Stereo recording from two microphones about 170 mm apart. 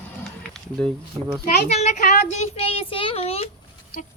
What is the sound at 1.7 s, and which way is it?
Speech, 40° left (ahead or behind).